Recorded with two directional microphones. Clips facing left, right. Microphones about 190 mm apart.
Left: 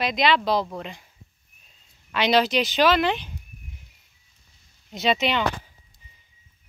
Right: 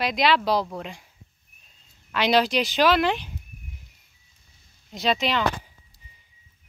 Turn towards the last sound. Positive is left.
turn(degrees=0)  # may be behind; listen again after turning